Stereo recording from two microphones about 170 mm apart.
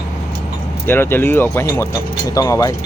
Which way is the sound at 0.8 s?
15° left (ahead or behind).